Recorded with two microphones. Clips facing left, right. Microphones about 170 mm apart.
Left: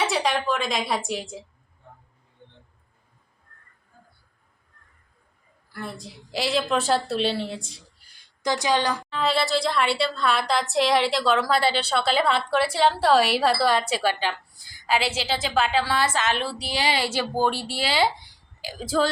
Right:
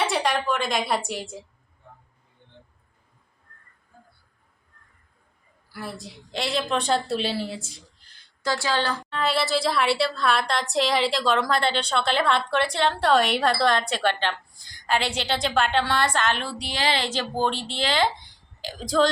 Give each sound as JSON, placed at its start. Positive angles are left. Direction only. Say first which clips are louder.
{"t": 0.0, "sound": "a woman's voice", "louder": "even", "side_deg": 0}
{"t": 5.7, "sound": "a woman's voice", "louder": "even", "side_deg": -5}
{"t": 7.9, "sound": "a sound", "louder": "right 1 dB", "side_deg": 10}
{"t": 9.0, "sound": "a woman's voice", "louder": "left 1 dB", "side_deg": 0}